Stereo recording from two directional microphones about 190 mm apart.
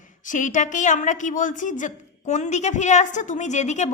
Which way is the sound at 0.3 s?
40° left (ahead or behind).